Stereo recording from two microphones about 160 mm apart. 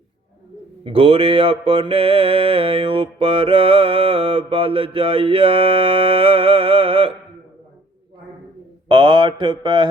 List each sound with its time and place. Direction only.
0.9 s mantra: 35° right (ahead or behind)
8.9 s speech: 30° right (ahead or behind)